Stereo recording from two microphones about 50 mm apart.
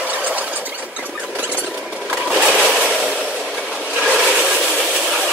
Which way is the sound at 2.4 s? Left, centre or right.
Centre.